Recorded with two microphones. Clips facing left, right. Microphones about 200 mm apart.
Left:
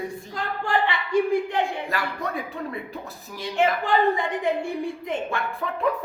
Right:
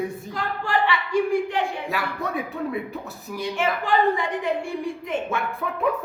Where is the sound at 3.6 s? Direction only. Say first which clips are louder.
Left 2 dB; 20° left (ahead or behind).